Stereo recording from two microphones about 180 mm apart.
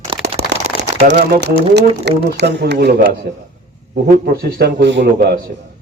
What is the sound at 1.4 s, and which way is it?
Speech, 70° right (ahead or behind).